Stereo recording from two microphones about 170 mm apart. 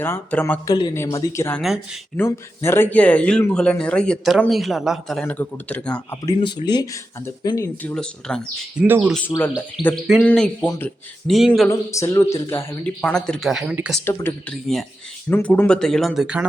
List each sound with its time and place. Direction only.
0.0 s speech: 10° left (ahead or behind)
0.7 s speech: 20° left (ahead or behind)
6.2 s speech: 25° left (ahead or behind)
7.8 s speech: 5° left (ahead or behind)
8.8 s speech: 5° right (ahead or behind)
9.3 s speech: 10° left (ahead or behind)
9.8 s speech: centre (ahead or behind)
11.3 s speech: centre (ahead or behind)
11.7 s speech: 20° left (ahead or behind); by 14.0 s 5° right (ahead or behind)
14.0 s speech: 15° left (ahead or behind)
14.5 s speech: centre (ahead or behind)